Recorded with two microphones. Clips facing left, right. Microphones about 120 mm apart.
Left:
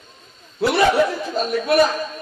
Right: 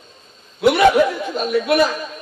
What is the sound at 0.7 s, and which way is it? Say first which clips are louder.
A man's voice: right 1 dB; 35° left (ahead or behind).